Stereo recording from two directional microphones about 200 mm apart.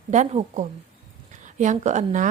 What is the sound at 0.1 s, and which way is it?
A woman's voice, 35° right (ahead or behind).